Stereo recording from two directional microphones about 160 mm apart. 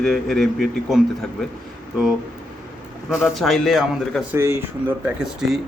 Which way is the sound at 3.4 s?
Centre (ahead or behind).